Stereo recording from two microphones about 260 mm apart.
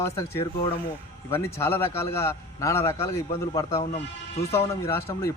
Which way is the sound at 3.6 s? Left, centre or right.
Left.